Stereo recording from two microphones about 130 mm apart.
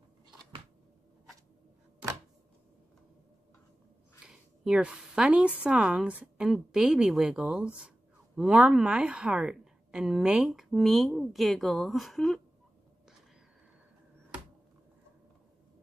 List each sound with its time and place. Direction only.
4.3 s a woman's voice: 5° right (ahead or behind)